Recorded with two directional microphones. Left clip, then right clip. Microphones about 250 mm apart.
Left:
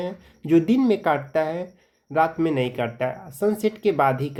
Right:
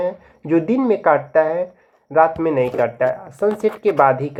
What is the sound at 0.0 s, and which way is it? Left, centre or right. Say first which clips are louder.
Speech: right 8 dB; left.